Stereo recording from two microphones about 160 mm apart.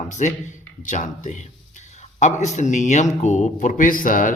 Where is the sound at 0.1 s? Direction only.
50° left (ahead or behind).